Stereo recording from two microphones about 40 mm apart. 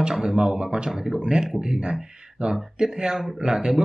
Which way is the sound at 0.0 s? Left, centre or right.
Centre.